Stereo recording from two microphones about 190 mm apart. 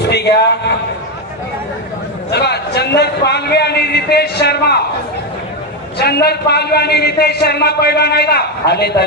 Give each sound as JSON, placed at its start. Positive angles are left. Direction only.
{"t": 0.1, "sound": "a man's voice", "side_deg": 60}
{"t": 2.3, "sound": "a man's voice", "side_deg": 60}
{"t": 6.0, "sound": "a man's voice", "side_deg": 55}